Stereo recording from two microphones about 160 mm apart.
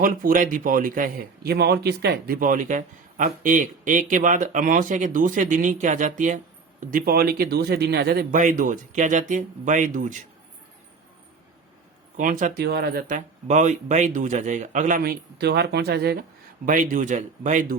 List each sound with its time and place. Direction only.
0.0 s speech: 60° right (ahead or behind)
12.1 s speech: 55° right (ahead or behind)
12.5 s a man's voice: 85° right
16.6 s a man's voice: 55° right (ahead or behind)